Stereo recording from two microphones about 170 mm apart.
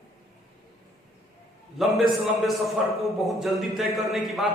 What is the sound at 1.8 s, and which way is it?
A man's voice, centre (ahead or behind).